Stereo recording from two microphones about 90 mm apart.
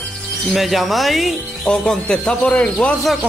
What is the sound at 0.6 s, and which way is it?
Speech, centre (ahead or behind).